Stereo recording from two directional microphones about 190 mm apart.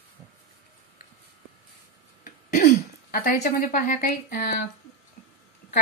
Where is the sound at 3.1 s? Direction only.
50° left (ahead or behind).